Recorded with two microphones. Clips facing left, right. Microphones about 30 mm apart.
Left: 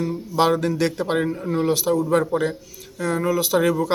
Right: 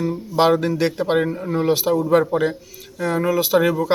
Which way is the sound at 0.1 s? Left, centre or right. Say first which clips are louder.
Right 3 dB; centre.